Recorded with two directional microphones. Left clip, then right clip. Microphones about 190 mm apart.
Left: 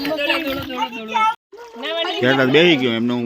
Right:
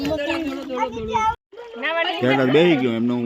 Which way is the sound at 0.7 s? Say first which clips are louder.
Right 3 dB; 35° left (ahead or behind).